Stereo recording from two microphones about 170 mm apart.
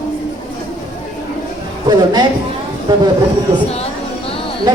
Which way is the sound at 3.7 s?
35° left (ahead or behind).